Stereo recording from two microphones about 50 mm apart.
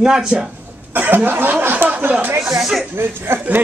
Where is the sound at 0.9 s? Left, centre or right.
Right.